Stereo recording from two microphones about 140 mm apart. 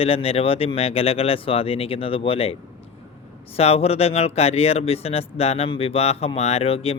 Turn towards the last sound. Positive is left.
turn(degrees=45)  # may be behind; listen again after turning